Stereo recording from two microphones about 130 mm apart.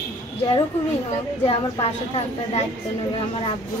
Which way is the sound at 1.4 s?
50° left (ahead or behind).